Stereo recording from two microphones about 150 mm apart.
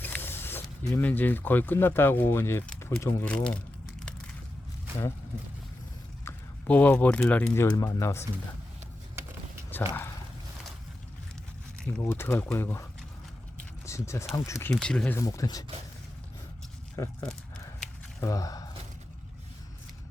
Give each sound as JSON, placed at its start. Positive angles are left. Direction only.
{"t": 0.0, "sound": "speech", "side_deg": 15}
{"t": 6.2, "sound": "speech", "side_deg": 10}
{"t": 9.7, "sound": "a sound", "side_deg": 10}
{"t": 11.8, "sound": "speech", "side_deg": 5}
{"t": 12.0, "sound": "speech", "side_deg": 15}
{"t": 13.8, "sound": "speech", "side_deg": 20}
{"t": 14.7, "sound": "speech", "side_deg": 5}
{"t": 15.2, "sound": "speech", "side_deg": 20}
{"t": 17.0, "sound": "speech", "side_deg": 20}
{"t": 18.2, "sound": "speech", "side_deg": 25}